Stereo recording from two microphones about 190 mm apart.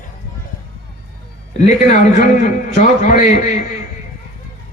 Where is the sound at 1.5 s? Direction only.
40° left (ahead or behind).